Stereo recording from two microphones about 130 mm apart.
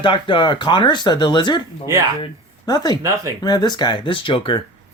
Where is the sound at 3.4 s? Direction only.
30° left (ahead or behind).